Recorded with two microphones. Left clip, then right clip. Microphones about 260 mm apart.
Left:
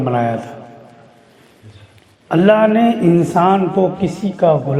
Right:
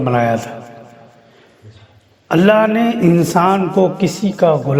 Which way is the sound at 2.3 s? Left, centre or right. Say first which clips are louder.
Even; right.